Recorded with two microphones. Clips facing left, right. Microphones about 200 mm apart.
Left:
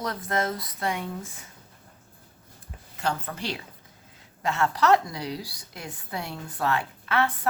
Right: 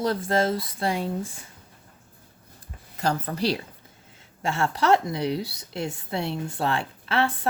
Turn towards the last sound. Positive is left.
turn(degrees=-30)  # may be behind; listen again after turning